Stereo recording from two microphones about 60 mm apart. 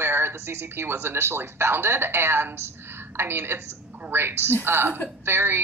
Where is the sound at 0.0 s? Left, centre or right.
Right.